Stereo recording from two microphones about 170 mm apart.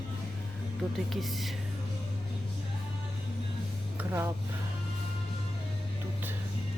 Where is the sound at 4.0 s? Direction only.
15° right (ahead or behind).